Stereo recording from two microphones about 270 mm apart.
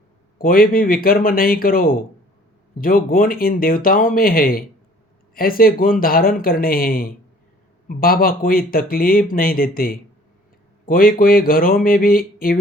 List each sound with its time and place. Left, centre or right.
0.3 s speech: left